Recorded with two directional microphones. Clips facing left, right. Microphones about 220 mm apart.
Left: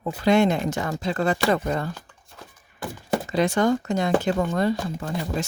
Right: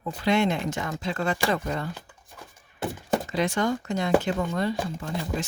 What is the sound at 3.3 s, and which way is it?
Speech, 35° left (ahead or behind).